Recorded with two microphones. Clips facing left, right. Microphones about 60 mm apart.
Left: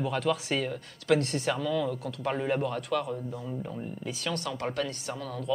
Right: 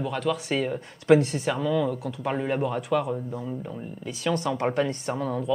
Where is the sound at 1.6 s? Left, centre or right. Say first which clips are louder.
Right 4 dB; centre.